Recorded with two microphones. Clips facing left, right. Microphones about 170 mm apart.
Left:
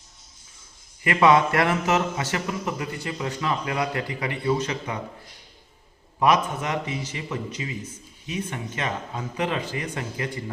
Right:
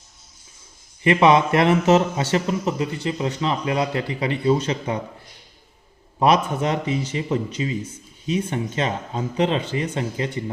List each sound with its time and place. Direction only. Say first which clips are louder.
1.0 s speech: right 3 dB; 20° right (ahead or behind)
6.1 s speech: right 3 dB; 30° right (ahead or behind)